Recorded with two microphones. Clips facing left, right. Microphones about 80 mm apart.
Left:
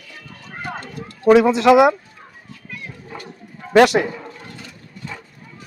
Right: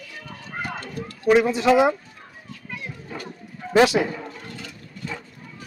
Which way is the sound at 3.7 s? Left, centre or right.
Left.